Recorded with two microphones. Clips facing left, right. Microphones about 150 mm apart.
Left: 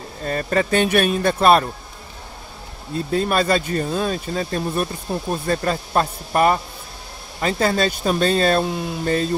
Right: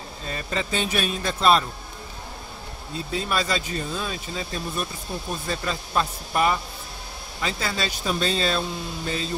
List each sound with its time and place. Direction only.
0.2 s speech: 50° left (ahead or behind)
3.1 s speech: 50° left (ahead or behind)